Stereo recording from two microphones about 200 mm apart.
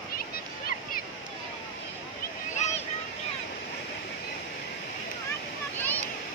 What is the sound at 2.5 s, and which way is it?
Vehicle, 35° left (ahead or behind).